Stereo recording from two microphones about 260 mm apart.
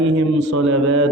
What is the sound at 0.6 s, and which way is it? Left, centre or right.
Mantra, right.